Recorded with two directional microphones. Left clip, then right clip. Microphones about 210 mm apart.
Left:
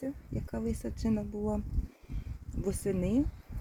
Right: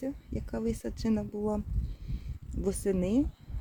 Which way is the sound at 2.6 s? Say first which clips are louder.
Right 3 dB; centre (ahead or behind).